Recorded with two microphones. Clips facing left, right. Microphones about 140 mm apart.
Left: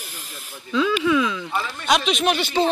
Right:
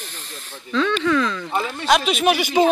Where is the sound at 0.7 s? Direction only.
5° left (ahead or behind).